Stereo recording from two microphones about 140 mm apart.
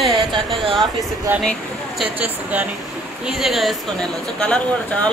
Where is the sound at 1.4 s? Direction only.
Centre (ahead or behind).